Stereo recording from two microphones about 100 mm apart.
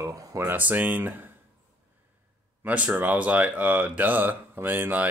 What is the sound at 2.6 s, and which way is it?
Speech, 15° right (ahead or behind).